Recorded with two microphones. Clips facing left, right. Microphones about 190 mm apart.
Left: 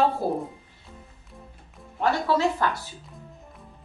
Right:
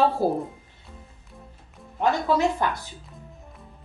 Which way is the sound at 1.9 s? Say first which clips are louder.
Right 1 dB; 15° right (ahead or behind).